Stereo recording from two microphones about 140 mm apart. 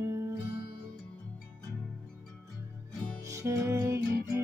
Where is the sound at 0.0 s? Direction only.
20° right (ahead or behind).